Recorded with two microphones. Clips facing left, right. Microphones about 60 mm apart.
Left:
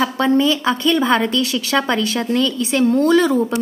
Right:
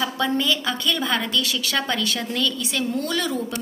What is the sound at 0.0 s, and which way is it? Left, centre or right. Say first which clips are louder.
A woman's voice: left 7 dB; left.